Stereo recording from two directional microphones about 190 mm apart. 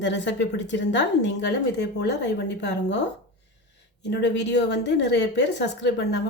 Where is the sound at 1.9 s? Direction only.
65° left (ahead or behind).